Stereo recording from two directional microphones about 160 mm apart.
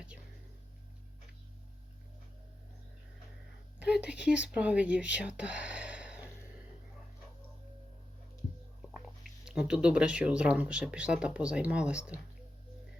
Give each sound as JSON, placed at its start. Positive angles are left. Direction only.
{"t": 3.8, "sound": "speech", "side_deg": -5}
{"t": 8.8, "sound": "speech", "side_deg": 0}